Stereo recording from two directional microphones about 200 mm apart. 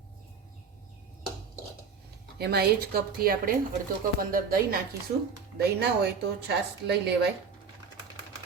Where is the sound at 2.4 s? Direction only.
50° right (ahead or behind).